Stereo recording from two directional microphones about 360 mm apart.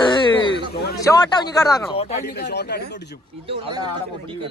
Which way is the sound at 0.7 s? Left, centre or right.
Left.